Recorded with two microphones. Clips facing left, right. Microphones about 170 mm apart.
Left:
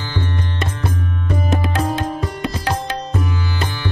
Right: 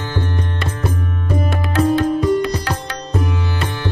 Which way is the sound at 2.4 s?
20° left (ahead or behind).